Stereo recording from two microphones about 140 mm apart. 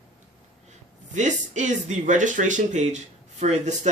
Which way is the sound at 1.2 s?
60° right (ahead or behind).